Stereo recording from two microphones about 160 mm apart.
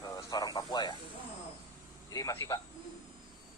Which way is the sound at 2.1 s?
20° left (ahead or behind).